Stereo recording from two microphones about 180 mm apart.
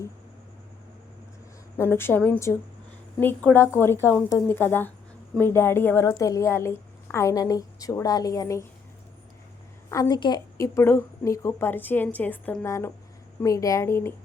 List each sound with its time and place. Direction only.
1.9 s a woman's voice: 10° left (ahead or behind)
9.9 s a woman's voice: 20° left (ahead or behind)